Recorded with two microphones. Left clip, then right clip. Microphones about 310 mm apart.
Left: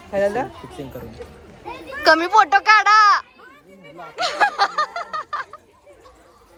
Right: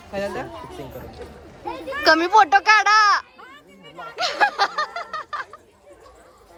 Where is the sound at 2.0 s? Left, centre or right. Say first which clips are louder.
Left 1 dB; centre.